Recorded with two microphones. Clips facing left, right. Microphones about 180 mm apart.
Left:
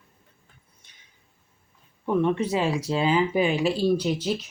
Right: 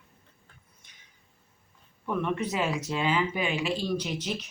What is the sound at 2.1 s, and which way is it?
Speech, 30° left (ahead or behind).